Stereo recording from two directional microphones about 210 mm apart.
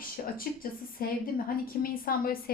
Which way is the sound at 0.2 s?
45° left (ahead or behind).